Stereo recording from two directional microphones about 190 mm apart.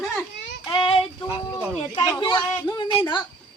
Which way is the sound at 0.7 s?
25° left (ahead or behind).